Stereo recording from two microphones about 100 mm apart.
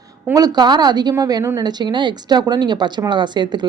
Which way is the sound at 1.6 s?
45° right (ahead or behind).